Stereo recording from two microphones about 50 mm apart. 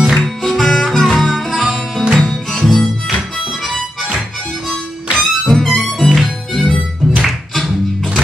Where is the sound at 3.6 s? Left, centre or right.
Centre.